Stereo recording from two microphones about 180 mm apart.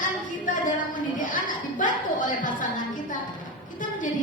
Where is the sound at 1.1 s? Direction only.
45° left (ahead or behind).